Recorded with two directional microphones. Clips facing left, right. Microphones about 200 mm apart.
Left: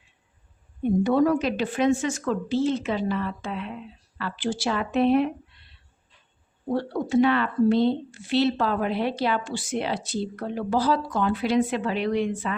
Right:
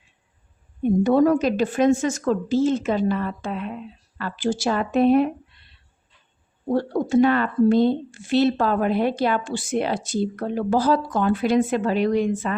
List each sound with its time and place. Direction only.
1.0 s speech: 45° right (ahead or behind)
6.7 s speech: 45° right (ahead or behind)